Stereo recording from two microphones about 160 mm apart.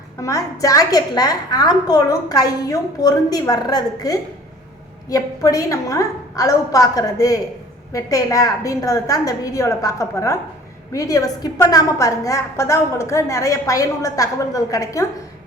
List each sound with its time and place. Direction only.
0.2 s a woman's voice: 20° left (ahead or behind)